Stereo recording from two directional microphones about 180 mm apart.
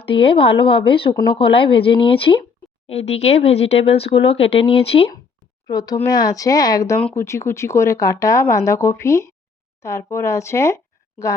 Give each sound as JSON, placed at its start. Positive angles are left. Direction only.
{"t": 0.3, "sound": "speech", "side_deg": 30}
{"t": 5.6, "sound": "speech", "side_deg": 20}